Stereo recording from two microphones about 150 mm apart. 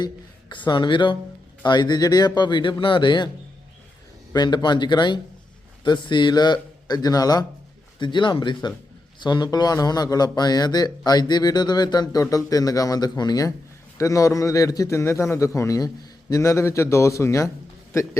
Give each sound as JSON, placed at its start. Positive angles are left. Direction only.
{"t": 0.0, "sound": "a man's voice", "side_deg": 30}
{"t": 4.3, "sound": "a man's voice", "side_deg": 30}